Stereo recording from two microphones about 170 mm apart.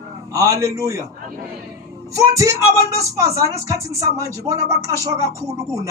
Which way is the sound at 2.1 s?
20° right (ahead or behind).